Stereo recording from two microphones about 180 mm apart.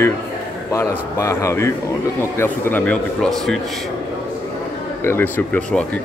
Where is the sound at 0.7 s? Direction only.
15° left (ahead or behind).